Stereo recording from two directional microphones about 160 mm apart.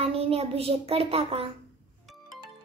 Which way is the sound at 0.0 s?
35° right (ahead or behind).